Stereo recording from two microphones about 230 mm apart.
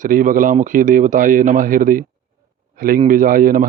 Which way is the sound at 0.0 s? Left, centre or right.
Right.